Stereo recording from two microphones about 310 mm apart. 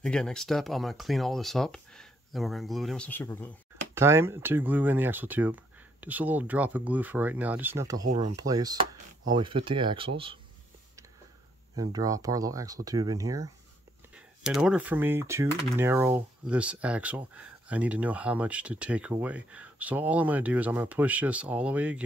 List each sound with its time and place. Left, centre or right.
0.0 s speech: centre
3.9 s speech: centre
8.1 s speech: right
8.4 s speech: centre
11.7 s speech: centre